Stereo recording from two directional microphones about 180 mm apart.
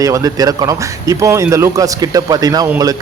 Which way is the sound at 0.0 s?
20° right (ahead or behind).